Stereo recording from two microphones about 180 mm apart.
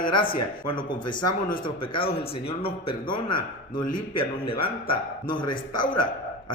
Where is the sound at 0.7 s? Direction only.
25° left (ahead or behind).